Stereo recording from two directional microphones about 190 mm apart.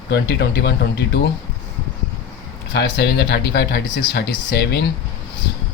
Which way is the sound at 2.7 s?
60° left (ahead or behind).